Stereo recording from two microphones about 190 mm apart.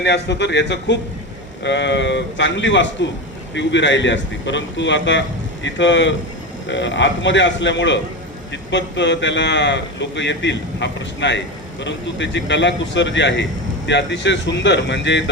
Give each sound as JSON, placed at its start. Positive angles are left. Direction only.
{"t": 0.0, "sound": "a man's voice", "side_deg": 65}